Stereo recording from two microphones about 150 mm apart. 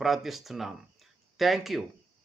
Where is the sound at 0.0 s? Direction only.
Centre (ahead or behind).